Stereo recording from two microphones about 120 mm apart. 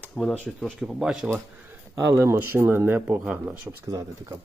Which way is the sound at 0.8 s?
5° right (ahead or behind).